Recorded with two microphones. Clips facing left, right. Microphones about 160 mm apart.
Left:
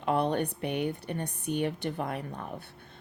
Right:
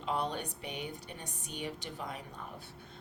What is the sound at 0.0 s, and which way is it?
A woman's voice, 60° left (ahead or behind).